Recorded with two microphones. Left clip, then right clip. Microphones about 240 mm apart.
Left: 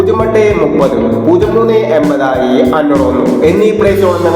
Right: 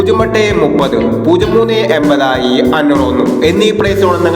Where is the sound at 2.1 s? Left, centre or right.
Right.